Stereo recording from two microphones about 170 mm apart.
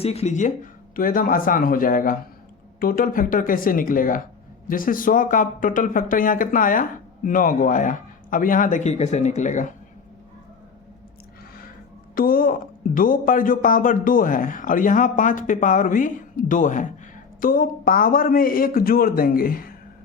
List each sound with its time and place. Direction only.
0.0 s a man's voice: 35° left (ahead or behind)
12.1 s a man's voice: 55° left (ahead or behind)